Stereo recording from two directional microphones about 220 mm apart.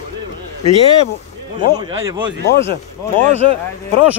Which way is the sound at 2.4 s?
50° left (ahead or behind).